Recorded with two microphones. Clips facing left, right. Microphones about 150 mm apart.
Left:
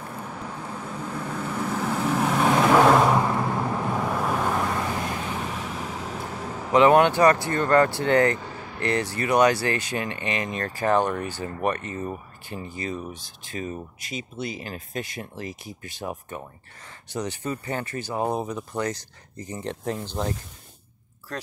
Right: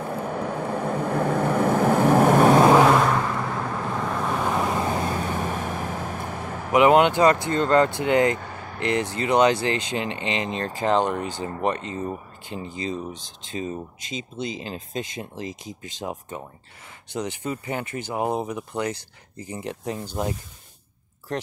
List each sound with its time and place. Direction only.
0.1 s vehicle: 60° right (ahead or behind)
2.9 s vehicle: 10° left (ahead or behind)
4.4 s vehicle: 5° right (ahead or behind)
4.9 s vehicle: 40° right (ahead or behind)
6.7 s speech: 20° right (ahead or behind)